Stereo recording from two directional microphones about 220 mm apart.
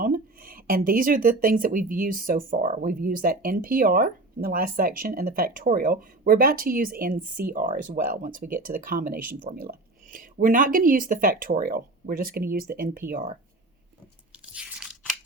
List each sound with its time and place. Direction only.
0.0 s speech: 40° right (ahead or behind)
14.3 s biting: 5° right (ahead or behind)